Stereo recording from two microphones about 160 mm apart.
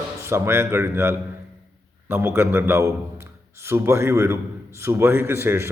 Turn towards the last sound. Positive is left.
turn(degrees=-15)  # may be behind; listen again after turning